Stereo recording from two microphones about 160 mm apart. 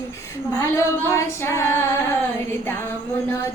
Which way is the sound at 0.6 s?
20° left (ahead or behind).